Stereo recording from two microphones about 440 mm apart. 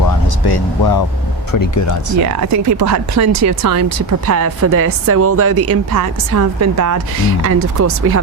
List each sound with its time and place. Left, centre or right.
0.4 s speech: left
1.5 s speech: left
2.5 s speech: right
5.9 s speech: right